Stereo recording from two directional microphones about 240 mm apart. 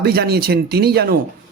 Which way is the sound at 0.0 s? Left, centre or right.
Right.